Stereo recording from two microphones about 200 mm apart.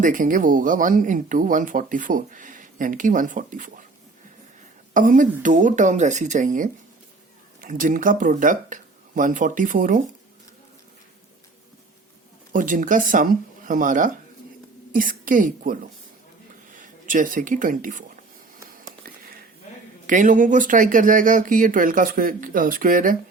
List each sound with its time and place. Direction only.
0.0 s speech: 40° right (ahead or behind)
4.9 s speech: 40° right (ahead or behind)
12.5 s a woman's voice: 40° right (ahead or behind)
19.0 s a sound: 45° right (ahead or behind)
20.1 s speech: 40° right (ahead or behind)